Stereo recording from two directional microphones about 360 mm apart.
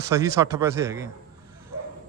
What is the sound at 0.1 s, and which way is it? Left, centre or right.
A man's voice, centre.